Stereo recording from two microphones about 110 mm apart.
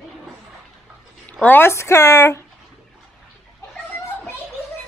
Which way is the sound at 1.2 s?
15° left (ahead or behind).